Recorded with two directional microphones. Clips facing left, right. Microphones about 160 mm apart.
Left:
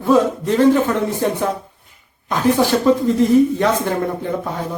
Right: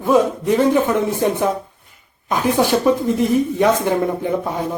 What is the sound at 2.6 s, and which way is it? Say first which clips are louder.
Speech: right 1 dB; 15° right (ahead or behind).